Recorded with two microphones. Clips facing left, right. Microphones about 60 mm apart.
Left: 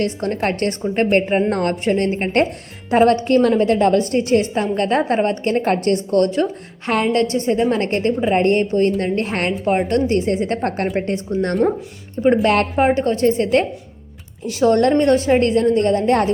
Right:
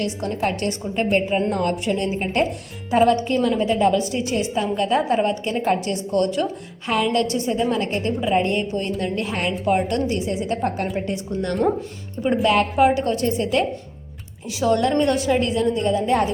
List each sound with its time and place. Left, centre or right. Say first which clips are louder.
0.0 s a woman's voice: left 3 dB; left
11.6 s speech: left 2 dB; centre
12.2 s a woman's voice: left 4 dB; left
12.8 s a woman's voice: left 3 dB; left
14.6 s a woman's voice: left 5 dB; left
14.9 s a woman's voice: left 5 dB; left
15.4 s a woman's voice: left 5 dB; left